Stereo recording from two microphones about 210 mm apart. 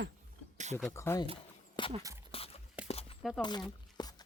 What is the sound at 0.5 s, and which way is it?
Speech, 35° right (ahead or behind).